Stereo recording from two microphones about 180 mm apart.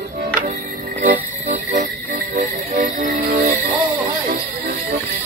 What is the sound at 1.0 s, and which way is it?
Music, 45° right (ahead or behind).